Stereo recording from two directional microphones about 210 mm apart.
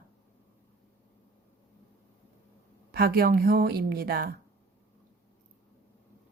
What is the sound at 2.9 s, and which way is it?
A woman's voice, 45° right (ahead or behind).